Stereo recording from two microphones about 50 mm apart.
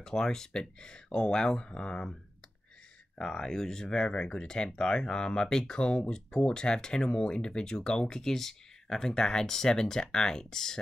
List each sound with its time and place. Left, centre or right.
0.0 s speech: centre
3.2 s speech: centre